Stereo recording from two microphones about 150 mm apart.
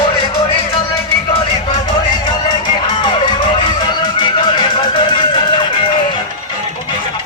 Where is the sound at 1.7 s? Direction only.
30° left (ahead or behind).